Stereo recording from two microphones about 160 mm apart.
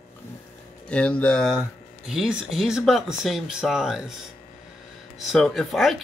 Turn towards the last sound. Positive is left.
turn(degrees=0)  # may be behind; listen again after turning